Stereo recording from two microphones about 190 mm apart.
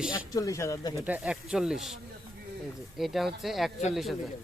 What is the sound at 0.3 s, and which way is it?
Speech, 15° left (ahead or behind).